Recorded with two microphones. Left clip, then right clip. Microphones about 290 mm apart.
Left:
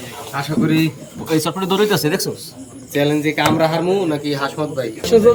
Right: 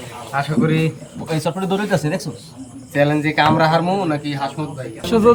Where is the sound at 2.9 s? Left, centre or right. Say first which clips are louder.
Right 1 dB; centre.